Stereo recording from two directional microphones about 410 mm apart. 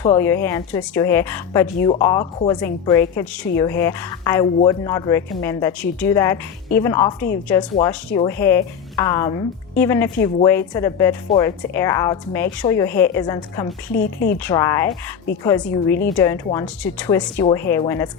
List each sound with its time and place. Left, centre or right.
0.0 s a woman's voice: centre
13.9 s speech: left
14.3 s a woman's voice: centre